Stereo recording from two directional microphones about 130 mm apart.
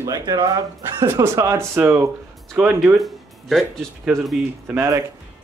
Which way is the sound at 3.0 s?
Centre (ahead or behind).